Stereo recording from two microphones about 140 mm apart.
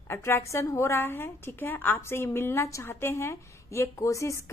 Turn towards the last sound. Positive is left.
turn(degrees=20)  # may be behind; listen again after turning